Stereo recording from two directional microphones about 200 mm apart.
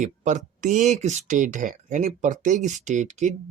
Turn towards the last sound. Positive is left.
turn(degrees=-35)  # may be behind; listen again after turning